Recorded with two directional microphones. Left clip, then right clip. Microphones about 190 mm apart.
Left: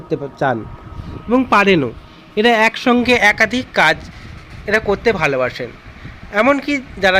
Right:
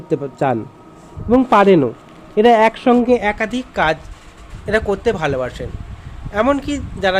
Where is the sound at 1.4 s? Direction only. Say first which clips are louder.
Right 1 dB; 25° left (ahead or behind).